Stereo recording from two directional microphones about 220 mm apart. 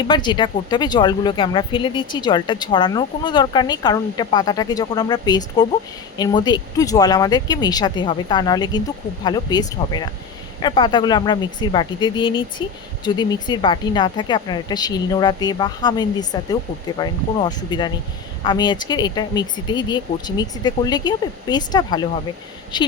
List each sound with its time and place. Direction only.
0.1 s speech: 20° left (ahead or behind)